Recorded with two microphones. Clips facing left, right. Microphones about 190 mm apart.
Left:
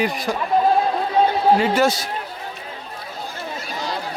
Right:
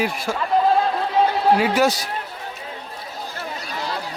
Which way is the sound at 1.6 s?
10° right (ahead or behind).